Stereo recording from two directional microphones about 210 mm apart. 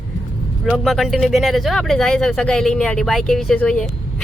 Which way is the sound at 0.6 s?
Centre (ahead or behind).